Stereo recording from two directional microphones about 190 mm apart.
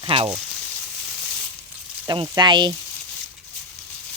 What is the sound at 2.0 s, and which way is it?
Speech, 25° right (ahead or behind).